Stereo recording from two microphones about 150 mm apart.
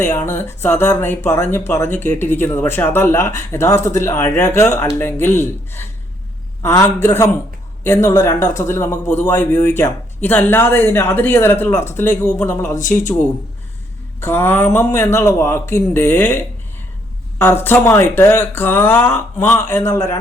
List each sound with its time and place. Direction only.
0.0 s speech: 15° left (ahead or behind)